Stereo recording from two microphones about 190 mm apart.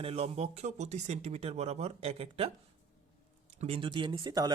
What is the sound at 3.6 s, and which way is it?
Speech, 30° right (ahead or behind).